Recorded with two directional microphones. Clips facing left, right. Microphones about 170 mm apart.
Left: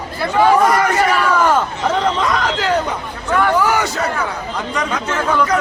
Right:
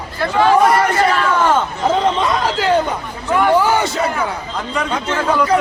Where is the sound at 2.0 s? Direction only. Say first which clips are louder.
Right 1 dB; 25° right (ahead or behind).